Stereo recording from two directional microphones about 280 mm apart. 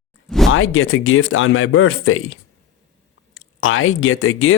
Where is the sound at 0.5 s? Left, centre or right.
Left.